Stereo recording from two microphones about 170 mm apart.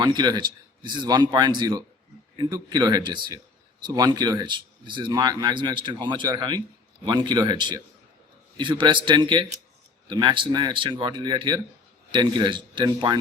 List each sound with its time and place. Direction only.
0.0 s speech: 25° right (ahead or behind)